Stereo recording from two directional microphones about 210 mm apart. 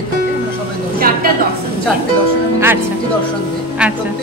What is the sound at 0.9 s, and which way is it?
Speech, 45° right (ahead or behind).